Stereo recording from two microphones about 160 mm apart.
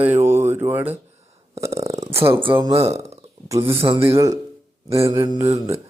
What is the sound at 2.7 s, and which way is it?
A man's voice, 40° right (ahead or behind).